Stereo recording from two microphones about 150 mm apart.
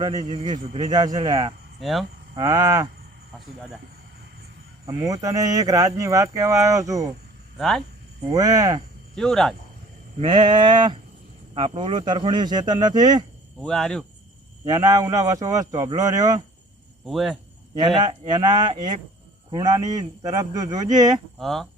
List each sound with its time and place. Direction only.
0.0 s speech: 30° right (ahead or behind)
1.8 s speech: centre (ahead or behind)
2.3 s speech: 25° right (ahead or behind)
4.9 s speech: 20° right (ahead or behind)
7.6 s speech: 5° left (ahead or behind)
8.3 s speech: 25° right (ahead or behind)
9.1 s speech: 5° left (ahead or behind)
10.2 s sheep: 30° right (ahead or behind)
11.5 s speech: 35° right (ahead or behind)
13.6 s speech: 5° left (ahead or behind)
14.6 s speech: 25° right (ahead or behind)
17.1 s speech: centre (ahead or behind)
17.7 s speech: 30° right (ahead or behind)
21.3 s speech: centre (ahead or behind)